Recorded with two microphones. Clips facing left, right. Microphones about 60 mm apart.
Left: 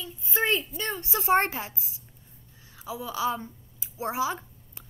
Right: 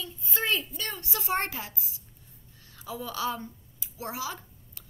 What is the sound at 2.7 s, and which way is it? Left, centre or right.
A woman's voice, centre.